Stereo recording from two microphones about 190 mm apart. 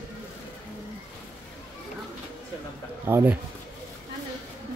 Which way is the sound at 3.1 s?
10° right (ahead or behind).